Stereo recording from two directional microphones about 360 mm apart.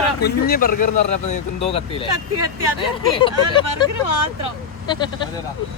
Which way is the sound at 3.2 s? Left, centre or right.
Centre.